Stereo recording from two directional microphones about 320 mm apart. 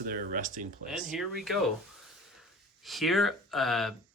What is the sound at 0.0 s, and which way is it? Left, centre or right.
Speech, right.